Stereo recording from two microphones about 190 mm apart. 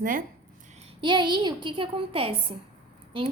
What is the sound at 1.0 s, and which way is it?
A woman's voice, 25° right (ahead or behind).